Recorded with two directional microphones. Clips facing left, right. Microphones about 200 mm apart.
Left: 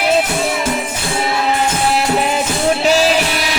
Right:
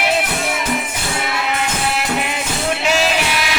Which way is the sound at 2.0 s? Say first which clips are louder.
Left 5 dB; 35° left (ahead or behind).